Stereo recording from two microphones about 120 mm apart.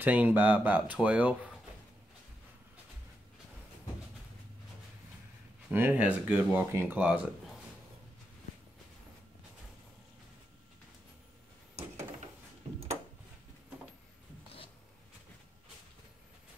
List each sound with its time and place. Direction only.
0.0 s speech: 15° right (ahead or behind)
5.7 s speech: 15° right (ahead or behind)